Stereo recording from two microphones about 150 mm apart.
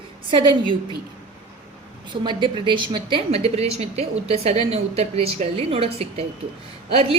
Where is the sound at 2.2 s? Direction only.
30° right (ahead or behind).